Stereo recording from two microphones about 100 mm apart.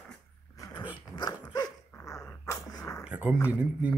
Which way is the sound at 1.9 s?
35° left (ahead or behind).